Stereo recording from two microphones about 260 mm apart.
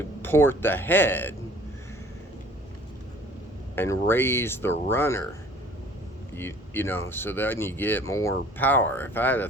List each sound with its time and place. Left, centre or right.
0.2 s speech: centre
3.8 s speech: centre
6.3 s speech: centre